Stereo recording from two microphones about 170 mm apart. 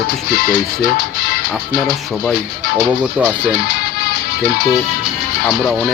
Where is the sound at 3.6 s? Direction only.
70° left (ahead or behind).